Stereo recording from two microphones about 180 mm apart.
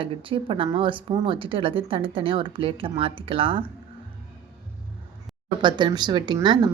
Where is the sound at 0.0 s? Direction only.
30° right (ahead or behind).